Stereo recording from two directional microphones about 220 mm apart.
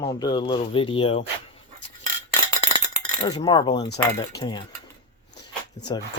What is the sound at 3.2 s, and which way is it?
Cutlery, 15° left (ahead or behind).